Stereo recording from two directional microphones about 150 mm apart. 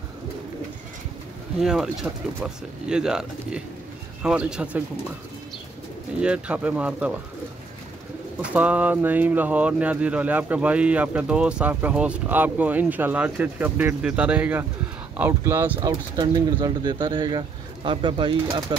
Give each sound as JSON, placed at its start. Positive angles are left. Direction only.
{"t": 1.6, "sound": "speech", "side_deg": 0}
{"t": 6.1, "sound": "speech", "side_deg": -5}
{"t": 8.4, "sound": "speech", "side_deg": -10}
{"t": 15.8, "sound": "speech", "side_deg": -30}